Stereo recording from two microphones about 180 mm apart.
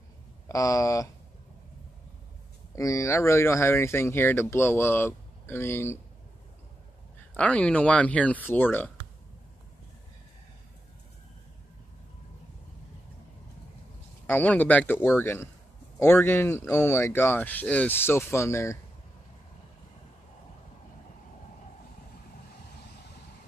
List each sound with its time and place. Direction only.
0.5 s speech: 20° left (ahead or behind)
2.7 s speech: 20° left (ahead or behind)
7.3 s speech: 5° left (ahead or behind)
14.2 s speech: 10° left (ahead or behind)